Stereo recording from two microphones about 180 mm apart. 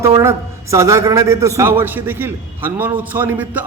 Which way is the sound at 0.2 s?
15° right (ahead or behind).